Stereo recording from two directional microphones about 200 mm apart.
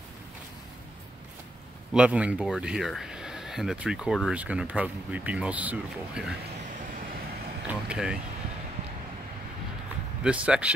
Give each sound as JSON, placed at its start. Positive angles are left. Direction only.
{"t": 2.0, "sound": "speech", "side_deg": -5}
{"t": 7.6, "sound": "speech", "side_deg": -5}
{"t": 10.2, "sound": "speech", "side_deg": -5}